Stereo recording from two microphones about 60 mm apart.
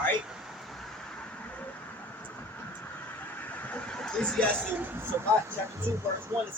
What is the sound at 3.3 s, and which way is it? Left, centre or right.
Vehicle, left.